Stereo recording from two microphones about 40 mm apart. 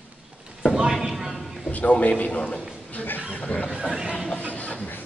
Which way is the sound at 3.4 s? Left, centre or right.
Left.